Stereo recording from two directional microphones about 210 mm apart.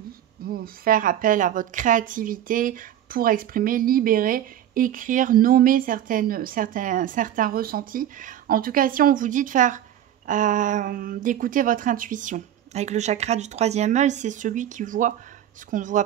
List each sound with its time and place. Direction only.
0.5 s a woman's voice: 40° right (ahead or behind)